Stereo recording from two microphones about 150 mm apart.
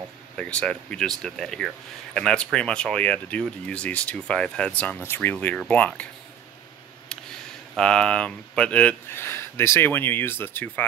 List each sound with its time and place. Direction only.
0.4 s speech: 5° left (ahead or behind)
7.1 s speech: 5° left (ahead or behind)